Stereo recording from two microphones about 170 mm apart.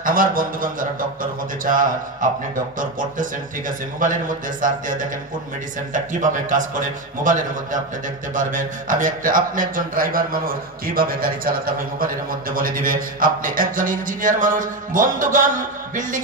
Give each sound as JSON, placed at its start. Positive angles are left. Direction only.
{"t": 0.0, "sound": "a man's voice", "side_deg": -55}
{"t": 15.9, "sound": "music", "side_deg": -50}